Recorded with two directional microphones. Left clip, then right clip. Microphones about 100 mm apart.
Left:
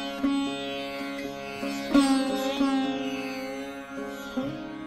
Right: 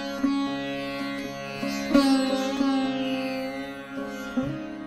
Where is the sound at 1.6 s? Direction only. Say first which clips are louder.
Right 1 dB; 35° right (ahead or behind).